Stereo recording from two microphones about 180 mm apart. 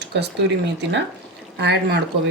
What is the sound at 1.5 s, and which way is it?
Speech, 70° right (ahead or behind).